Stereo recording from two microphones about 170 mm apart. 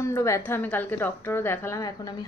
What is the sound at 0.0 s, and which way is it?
A woman's voice, 15° left (ahead or behind).